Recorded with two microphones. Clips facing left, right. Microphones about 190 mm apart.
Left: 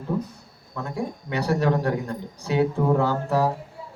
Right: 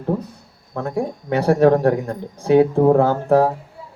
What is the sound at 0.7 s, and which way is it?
Speech, 55° right (ahead or behind).